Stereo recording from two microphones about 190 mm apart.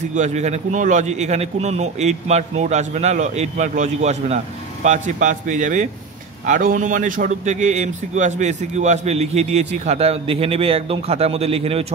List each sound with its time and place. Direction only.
0.1 s a man's voice: 40° right (ahead or behind)